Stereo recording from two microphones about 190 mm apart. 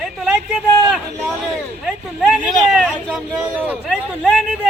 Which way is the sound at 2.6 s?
Centre (ahead or behind).